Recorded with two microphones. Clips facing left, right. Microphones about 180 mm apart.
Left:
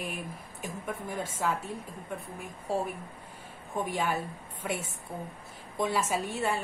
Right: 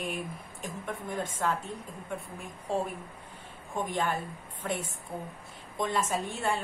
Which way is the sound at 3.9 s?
5° left (ahead or behind).